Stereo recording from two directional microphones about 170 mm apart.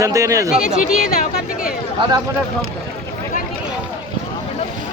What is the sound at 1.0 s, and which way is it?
Speech, 60° left (ahead or behind).